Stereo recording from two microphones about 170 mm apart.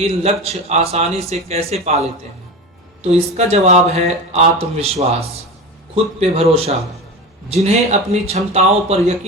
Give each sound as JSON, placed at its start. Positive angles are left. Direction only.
{"t": 0.2, "sound": "speech", "side_deg": -40}